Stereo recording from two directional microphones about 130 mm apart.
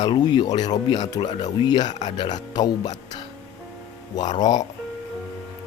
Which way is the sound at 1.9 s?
65° left (ahead or behind).